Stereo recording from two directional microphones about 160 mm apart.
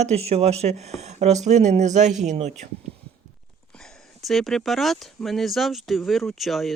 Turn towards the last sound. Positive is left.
turn(degrees=0)  # may be behind; listen again after turning